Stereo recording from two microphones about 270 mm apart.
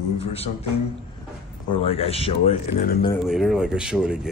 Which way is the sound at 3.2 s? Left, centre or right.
Centre.